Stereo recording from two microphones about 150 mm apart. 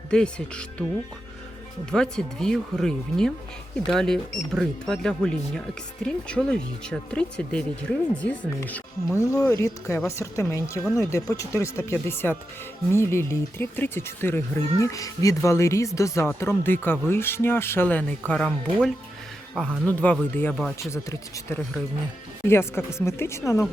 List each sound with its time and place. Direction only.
0.1 s speech: 5° left (ahead or behind)
1.9 s speech: 5° left (ahead or behind)
9.2 s speech: 20° left (ahead or behind); by 20.7 s 5° left (ahead or behind)
20.9 s speech: 20° left (ahead or behind)